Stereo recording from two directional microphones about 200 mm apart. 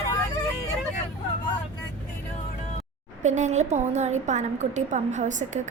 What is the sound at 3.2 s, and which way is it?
A woman's voice, 35° right (ahead or behind).